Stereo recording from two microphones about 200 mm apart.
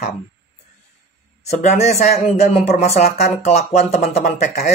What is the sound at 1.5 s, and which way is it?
Speech, 35° left (ahead or behind).